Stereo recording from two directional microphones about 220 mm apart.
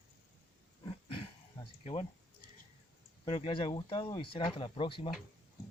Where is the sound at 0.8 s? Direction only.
25° left (ahead or behind).